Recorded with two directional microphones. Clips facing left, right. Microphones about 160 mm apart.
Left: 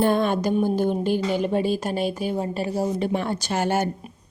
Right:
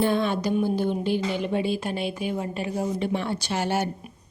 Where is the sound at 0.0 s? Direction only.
50° left (ahead or behind).